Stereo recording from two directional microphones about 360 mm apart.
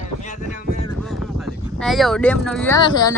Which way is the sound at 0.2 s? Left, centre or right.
Centre.